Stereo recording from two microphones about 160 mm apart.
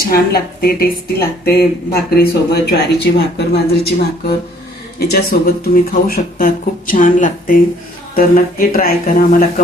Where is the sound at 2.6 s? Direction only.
85° left.